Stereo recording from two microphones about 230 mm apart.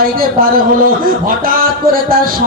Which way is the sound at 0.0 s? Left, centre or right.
Right.